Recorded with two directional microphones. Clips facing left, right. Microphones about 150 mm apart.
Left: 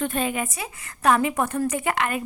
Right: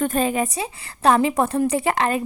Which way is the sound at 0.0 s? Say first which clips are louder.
Right 5 dB; 40° right (ahead or behind).